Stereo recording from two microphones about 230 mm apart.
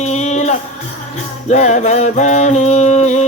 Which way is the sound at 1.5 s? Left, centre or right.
Left.